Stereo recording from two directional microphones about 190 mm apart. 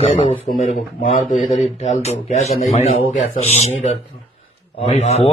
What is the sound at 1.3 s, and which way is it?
Speech, centre (ahead or behind).